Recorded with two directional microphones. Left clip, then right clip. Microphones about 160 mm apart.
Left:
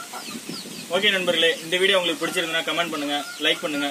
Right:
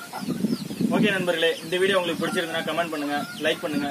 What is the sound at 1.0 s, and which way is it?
Speech, centre (ahead or behind).